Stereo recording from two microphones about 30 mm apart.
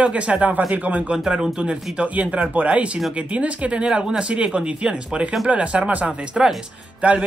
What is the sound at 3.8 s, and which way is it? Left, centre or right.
A man's voice, right.